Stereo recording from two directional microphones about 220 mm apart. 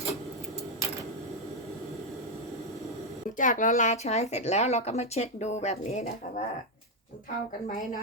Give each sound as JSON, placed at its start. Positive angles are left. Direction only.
{"t": 3.3, "sound": "speech", "side_deg": 35}